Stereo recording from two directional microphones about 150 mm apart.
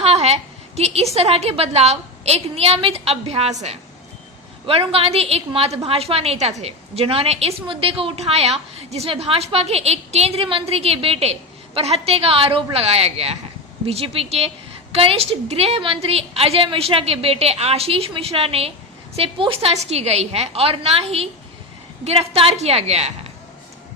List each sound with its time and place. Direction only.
0.0 s a sound: 45° right (ahead or behind)
0.8 s a woman's voice: 45° right (ahead or behind)
4.6 s a woman's voice: 40° right (ahead or behind)